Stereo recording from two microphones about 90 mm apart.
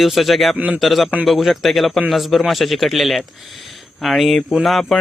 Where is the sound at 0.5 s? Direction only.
15° right (ahead or behind).